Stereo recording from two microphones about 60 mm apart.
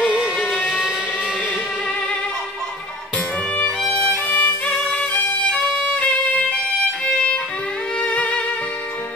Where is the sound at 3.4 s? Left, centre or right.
Centre.